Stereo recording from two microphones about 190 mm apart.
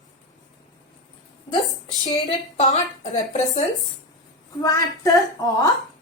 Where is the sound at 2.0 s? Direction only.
20° left (ahead or behind).